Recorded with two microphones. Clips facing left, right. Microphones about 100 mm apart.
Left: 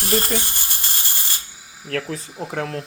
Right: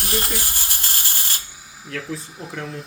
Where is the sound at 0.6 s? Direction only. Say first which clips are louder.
Right 1 dB; 15° left (ahead or behind).